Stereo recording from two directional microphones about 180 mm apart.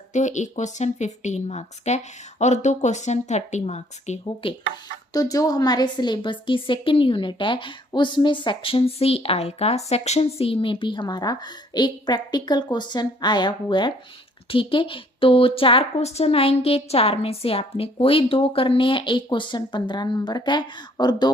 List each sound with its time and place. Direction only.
0.1 s speech: 40° left (ahead or behind)
5.1 s a woman's voice: 20° left (ahead or behind)